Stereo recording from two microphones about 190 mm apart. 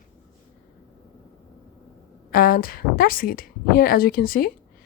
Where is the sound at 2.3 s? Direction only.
50° left (ahead or behind).